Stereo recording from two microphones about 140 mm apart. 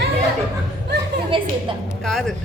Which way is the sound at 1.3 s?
40° right (ahead or behind).